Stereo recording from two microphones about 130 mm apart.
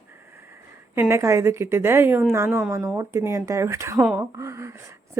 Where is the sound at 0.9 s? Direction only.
20° right (ahead or behind).